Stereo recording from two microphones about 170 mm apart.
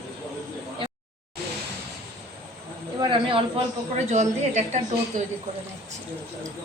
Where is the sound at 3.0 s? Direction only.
30° right (ahead or behind).